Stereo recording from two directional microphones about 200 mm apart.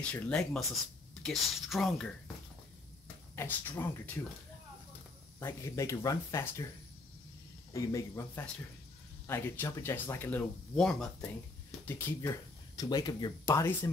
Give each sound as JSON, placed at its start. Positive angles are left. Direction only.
{"t": 0.0, "sound": "speech", "side_deg": 5}
{"t": 3.3, "sound": "speech", "side_deg": 10}
{"t": 5.4, "sound": "speech", "side_deg": 15}
{"t": 7.7, "sound": "speech", "side_deg": 15}
{"t": 11.8, "sound": "speech", "side_deg": 15}